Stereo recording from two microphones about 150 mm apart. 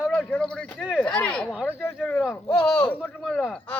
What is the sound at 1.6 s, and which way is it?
Speech, 10° left (ahead or behind).